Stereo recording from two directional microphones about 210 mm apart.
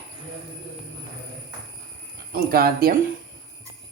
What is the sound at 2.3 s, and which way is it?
Speech, 45° right (ahead or behind).